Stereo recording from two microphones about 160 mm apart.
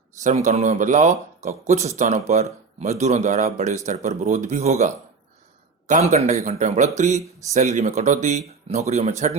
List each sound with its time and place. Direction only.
0.2 s speech: 50° right (ahead or behind)